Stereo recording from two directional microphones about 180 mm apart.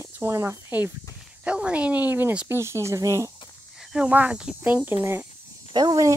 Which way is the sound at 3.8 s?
5° right (ahead or behind).